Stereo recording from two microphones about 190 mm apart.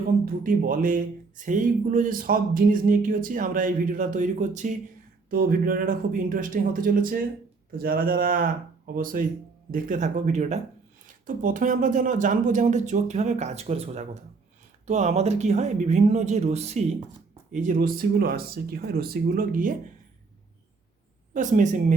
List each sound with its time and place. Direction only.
0.3 s speech: 45° right (ahead or behind)
21.3 s speech: 40° right (ahead or behind)